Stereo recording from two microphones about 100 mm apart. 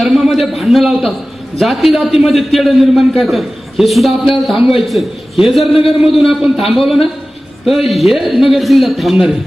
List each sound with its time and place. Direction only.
0.0 s a man's voice: centre (ahead or behind)